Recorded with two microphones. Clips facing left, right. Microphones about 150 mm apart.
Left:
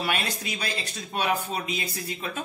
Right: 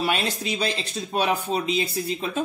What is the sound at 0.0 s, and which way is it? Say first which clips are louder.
Speech: right 4 dB; 30° right (ahead or behind).